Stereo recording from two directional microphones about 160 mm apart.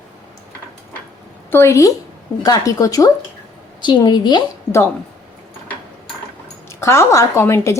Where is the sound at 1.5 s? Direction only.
15° left (ahead or behind).